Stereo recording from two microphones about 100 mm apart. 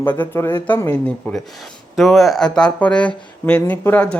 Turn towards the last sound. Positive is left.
turn(degrees=15)  # may be behind; listen again after turning